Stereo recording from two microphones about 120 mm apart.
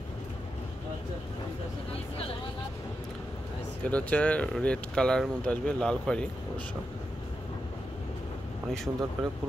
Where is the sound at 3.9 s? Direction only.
10° left (ahead or behind).